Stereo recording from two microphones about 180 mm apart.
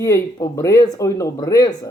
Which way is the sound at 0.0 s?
15° left (ahead or behind).